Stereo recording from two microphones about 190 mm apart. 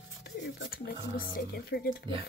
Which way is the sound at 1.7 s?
55° left (ahead or behind).